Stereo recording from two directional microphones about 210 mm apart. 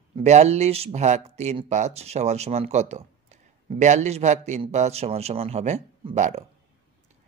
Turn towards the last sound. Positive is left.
turn(degrees=-35)  # may be behind; listen again after turning